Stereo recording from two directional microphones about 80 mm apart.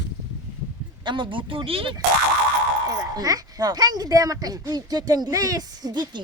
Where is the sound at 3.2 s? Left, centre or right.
Right.